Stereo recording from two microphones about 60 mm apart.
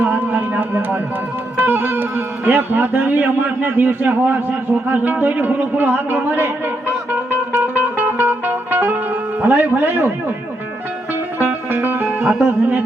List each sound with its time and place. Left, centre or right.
0.0 s music: right
1.5 s speech: right
7.5 s music: right
9.4 s speech: right
11.3 s music: right